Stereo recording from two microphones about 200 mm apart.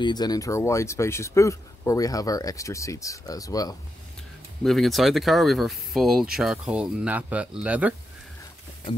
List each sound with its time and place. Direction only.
0.0 s speech: 20° left (ahead or behind)
4.6 s speech: centre (ahead or behind)